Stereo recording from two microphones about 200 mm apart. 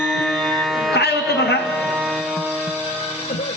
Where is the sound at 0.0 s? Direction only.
Centre (ahead or behind).